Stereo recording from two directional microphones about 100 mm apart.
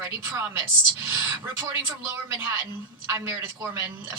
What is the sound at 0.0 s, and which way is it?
A woman's voice, 25° right (ahead or behind).